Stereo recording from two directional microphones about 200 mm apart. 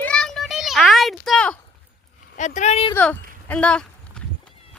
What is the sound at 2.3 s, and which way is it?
Speech, 35° left (ahead or behind).